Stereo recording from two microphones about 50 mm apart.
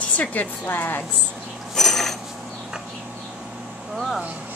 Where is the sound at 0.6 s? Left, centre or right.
Left.